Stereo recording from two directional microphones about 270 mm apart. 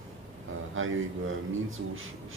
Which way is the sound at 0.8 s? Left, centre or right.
Right.